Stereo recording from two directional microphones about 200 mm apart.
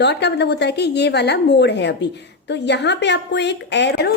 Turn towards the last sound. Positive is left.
turn(degrees=55)  # may be behind; listen again after turning